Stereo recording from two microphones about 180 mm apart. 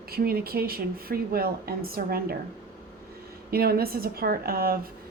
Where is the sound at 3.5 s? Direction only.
60° right (ahead or behind).